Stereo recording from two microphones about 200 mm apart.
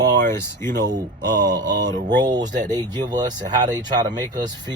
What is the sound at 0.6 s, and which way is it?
Speech, 15° left (ahead or behind).